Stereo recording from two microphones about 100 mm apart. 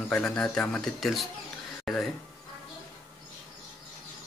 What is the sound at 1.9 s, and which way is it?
Music, centre (ahead or behind).